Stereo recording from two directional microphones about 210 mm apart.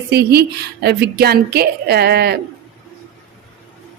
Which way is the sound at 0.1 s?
50° right (ahead or behind).